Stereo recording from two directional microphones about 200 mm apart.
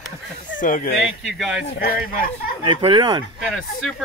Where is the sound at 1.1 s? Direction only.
5° right (ahead or behind).